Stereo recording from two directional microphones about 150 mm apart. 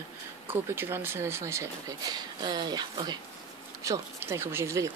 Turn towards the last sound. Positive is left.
turn(degrees=-20)  # may be behind; listen again after turning